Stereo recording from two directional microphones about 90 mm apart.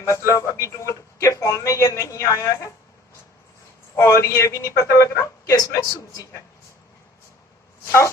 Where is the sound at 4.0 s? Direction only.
30° left (ahead or behind).